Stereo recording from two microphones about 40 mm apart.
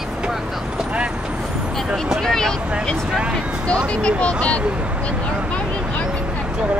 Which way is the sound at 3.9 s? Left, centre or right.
Left.